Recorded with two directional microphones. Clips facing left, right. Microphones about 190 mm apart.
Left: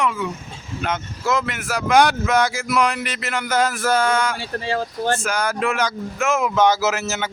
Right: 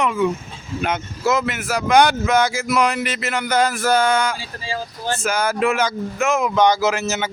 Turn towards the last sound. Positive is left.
turn(degrees=0)  # may be behind; listen again after turning